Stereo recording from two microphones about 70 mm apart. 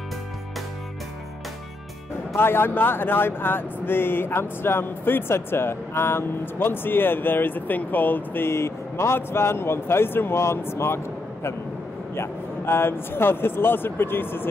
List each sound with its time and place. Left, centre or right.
2.3 s speech: left
12.2 s speech: left